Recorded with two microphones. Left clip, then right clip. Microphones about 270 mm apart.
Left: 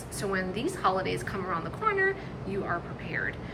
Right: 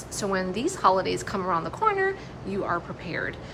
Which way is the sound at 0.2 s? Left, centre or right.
Centre.